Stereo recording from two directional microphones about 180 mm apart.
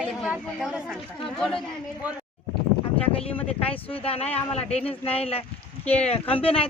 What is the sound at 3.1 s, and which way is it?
Speech, 35° left (ahead or behind).